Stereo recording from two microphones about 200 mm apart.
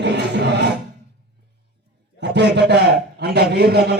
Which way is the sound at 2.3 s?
60° right (ahead or behind).